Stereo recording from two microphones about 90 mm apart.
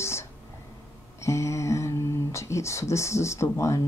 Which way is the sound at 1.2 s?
35° left (ahead or behind).